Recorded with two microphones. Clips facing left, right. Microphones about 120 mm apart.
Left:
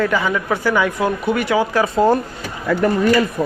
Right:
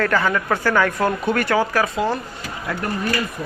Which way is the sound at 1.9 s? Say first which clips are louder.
Left 7 dB; 40° left (ahead or behind).